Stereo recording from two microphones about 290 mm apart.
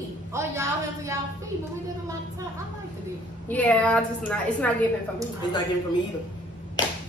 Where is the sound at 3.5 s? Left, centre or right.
Centre.